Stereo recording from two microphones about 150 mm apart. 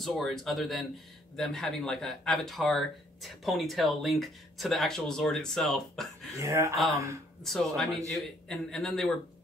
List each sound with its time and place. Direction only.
0.0 s speech: centre (ahead or behind)
6.3 s speech: 20° right (ahead or behind)
7.4 s speech: centre (ahead or behind)